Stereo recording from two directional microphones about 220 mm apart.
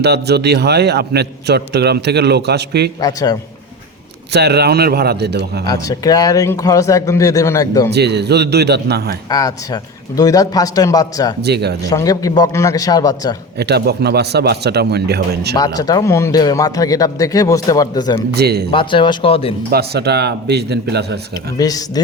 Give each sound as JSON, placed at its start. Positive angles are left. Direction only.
{"t": 0.0, "sound": "a man's voice", "side_deg": -50}
{"t": 3.0, "sound": "a man's voice", "side_deg": 15}
{"t": 4.3, "sound": "a man's voice", "side_deg": -50}
{"t": 5.6, "sound": "a man's voice", "side_deg": 15}
{"t": 7.9, "sound": "a man's voice", "side_deg": -50}
{"t": 9.3, "sound": "a man's voice", "side_deg": 15}
{"t": 11.4, "sound": "a man's voice", "side_deg": -50}
{"t": 11.9, "sound": "a man's voice", "side_deg": 15}
{"t": 13.6, "sound": "a man's voice", "side_deg": -50}
{"t": 15.5, "sound": "a man's voice", "side_deg": 15}
{"t": 18.3, "sound": "a man's voice", "side_deg": -45}
{"t": 18.7, "sound": "speech", "side_deg": 25}
{"t": 19.7, "sound": "a man's voice", "side_deg": -45}
{"t": 21.6, "sound": "a man's voice", "side_deg": 15}